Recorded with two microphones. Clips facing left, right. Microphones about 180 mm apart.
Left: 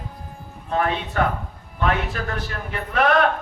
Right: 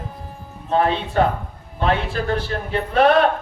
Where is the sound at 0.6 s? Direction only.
30° right (ahead or behind).